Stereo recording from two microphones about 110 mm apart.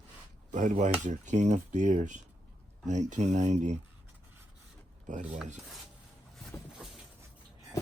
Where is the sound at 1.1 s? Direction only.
90° right.